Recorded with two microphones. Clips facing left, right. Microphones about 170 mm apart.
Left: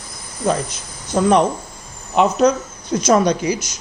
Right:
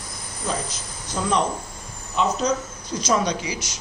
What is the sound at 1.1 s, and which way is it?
Speech, 60° left (ahead or behind).